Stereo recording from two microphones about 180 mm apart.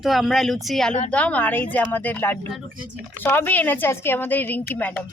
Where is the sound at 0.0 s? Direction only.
Centre (ahead or behind).